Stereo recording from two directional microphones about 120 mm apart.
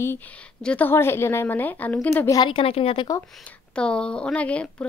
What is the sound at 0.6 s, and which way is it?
A woman's voice, 10° left (ahead or behind).